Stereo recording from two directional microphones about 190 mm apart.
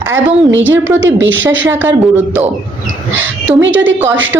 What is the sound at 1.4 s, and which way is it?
Speech, 85° right.